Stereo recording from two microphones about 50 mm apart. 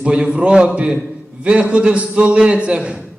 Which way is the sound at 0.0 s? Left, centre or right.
Centre.